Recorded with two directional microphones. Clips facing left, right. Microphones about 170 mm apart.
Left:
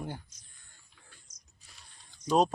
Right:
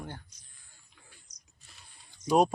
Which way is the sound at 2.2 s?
10° right (ahead or behind).